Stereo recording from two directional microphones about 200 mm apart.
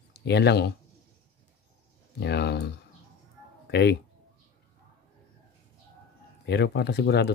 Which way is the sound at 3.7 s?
55° left (ahead or behind).